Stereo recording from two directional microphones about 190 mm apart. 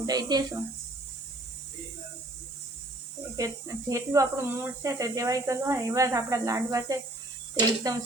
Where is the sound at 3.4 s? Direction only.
15° right (ahead or behind).